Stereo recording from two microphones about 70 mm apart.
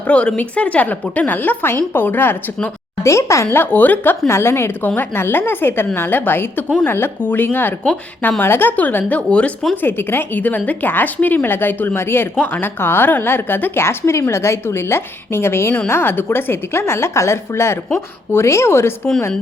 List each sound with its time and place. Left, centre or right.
0.1 s a woman's voice: centre
3.0 s a woman's voice: left
4.3 s a woman's voice: left; by 9.5 s centre
9.8 s a woman's voice: left